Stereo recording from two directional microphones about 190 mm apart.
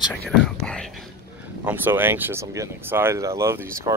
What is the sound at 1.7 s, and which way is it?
Speech, 10° right (ahead or behind).